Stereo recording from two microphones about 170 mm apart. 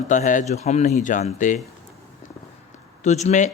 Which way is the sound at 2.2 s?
50° left (ahead or behind).